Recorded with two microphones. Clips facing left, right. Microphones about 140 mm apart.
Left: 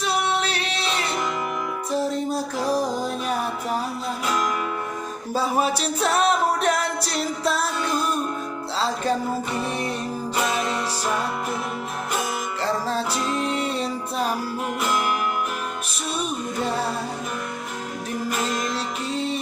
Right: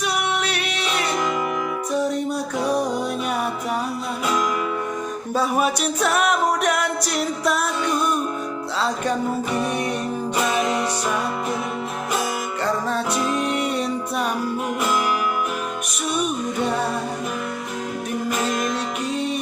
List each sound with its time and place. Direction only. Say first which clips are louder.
0.0 s music: even; 30° left (ahead or behind)
5.3 s music: right 1 dB; 30° left (ahead or behind)
10.7 s music: right 3 dB; centre (ahead or behind)
13.5 s music: right 2 dB; 30° left (ahead or behind)